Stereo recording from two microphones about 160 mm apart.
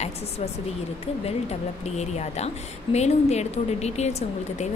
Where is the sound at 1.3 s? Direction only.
45° left (ahead or behind).